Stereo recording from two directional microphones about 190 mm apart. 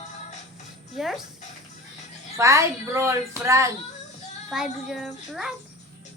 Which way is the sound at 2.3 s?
15° right (ahead or behind).